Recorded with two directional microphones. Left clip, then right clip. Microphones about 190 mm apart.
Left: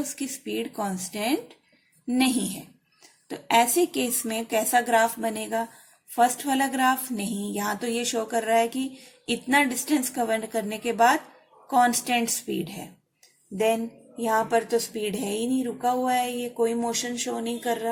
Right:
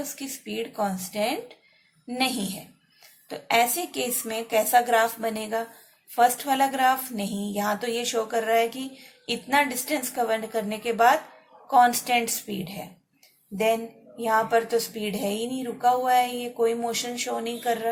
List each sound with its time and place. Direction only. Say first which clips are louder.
0.0 s speech: left 2 dB; 30° left (ahead or behind)
14.2 s speech: right 1 dB; 25° left (ahead or behind)